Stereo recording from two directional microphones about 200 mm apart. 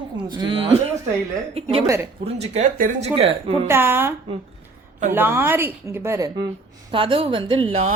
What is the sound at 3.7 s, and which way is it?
Speech, 10° right (ahead or behind).